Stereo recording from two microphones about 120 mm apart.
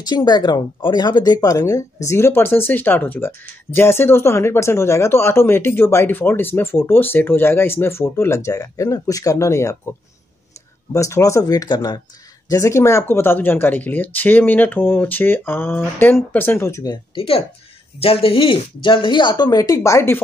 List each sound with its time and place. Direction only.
0.0 s speech: 35° left (ahead or behind)
16.9 s speech: 50° left (ahead or behind); by 20.2 s 25° left (ahead or behind)